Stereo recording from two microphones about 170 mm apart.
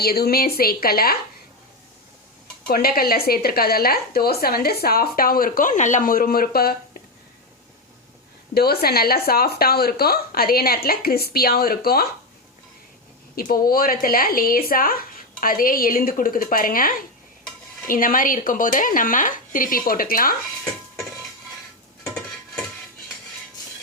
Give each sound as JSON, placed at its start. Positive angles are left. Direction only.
{"t": 0.0, "sound": "a woman's voice", "side_deg": 65}
{"t": 2.6, "sound": "a woman's voice", "side_deg": 60}
{"t": 8.5, "sound": "a woman's voice", "side_deg": 65}
{"t": 13.3, "sound": "a woman's voice", "side_deg": 60}